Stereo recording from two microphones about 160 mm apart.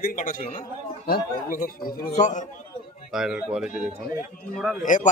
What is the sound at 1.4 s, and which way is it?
Speech, 60° left (ahead or behind).